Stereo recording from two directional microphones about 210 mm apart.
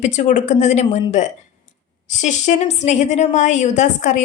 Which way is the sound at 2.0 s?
35° left (ahead or behind).